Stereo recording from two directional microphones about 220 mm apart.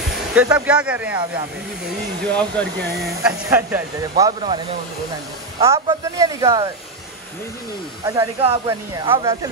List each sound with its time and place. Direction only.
0.3 s speech: 5° right (ahead or behind)
2.2 s speech: 5° left (ahead or behind)
2.6 s speech: 45° right (ahead or behind)
3.3 s speech: 10° right (ahead or behind)
4.2 s speech: 20° right (ahead or behind)
5.6 s speech: 15° right (ahead or behind)
8.0 s speech: 15° right (ahead or behind)